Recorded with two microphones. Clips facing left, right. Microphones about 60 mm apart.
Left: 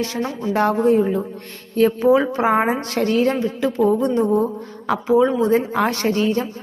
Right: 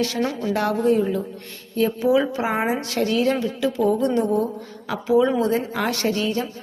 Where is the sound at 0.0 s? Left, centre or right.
Left.